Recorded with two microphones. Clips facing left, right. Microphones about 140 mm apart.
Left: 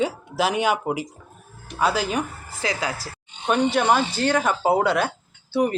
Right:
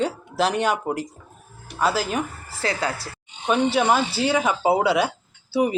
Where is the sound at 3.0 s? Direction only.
Centre (ahead or behind).